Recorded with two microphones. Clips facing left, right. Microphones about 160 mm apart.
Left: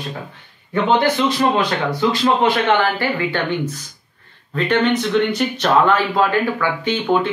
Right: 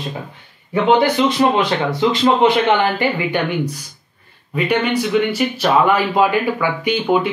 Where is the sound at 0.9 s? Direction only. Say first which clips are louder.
Right 1 dB; 10° right (ahead or behind).